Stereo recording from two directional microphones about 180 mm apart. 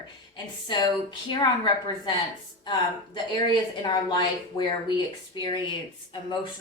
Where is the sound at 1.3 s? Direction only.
25° left (ahead or behind).